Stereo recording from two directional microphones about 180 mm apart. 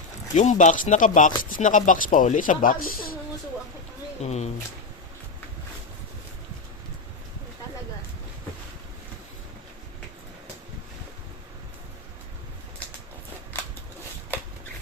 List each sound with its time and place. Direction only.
0.3 s speech: 40° left (ahead or behind)
4.2 s speech: 35° left (ahead or behind)